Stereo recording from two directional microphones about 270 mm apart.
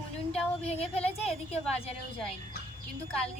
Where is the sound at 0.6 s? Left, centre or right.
Left.